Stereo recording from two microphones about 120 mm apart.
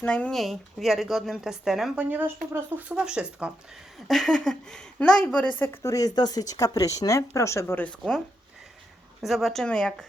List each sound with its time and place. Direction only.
0.0 s a woman's voice: 10° left (ahead or behind)
2.0 s speech: 15° right (ahead or behind)
2.9 s speech: 5° right (ahead or behind)
4.1 s a woman's voice: 5° left (ahead or behind); by 7.9 s 20° left (ahead or behind)
7.9 s a woman's voice: 5° left (ahead or behind)
9.2 s a woman's voice: centre (ahead or behind)